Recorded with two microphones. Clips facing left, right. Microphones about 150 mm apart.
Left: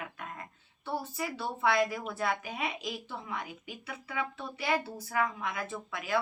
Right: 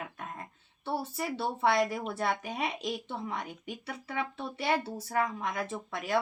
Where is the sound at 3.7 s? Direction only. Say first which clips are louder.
Right 3 dB; 35° right (ahead or behind).